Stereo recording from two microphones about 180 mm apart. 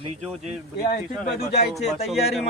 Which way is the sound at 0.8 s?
45° left (ahead or behind).